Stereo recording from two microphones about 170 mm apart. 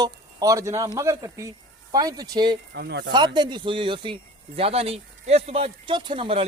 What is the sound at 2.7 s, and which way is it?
Speech, 75° right (ahead or behind).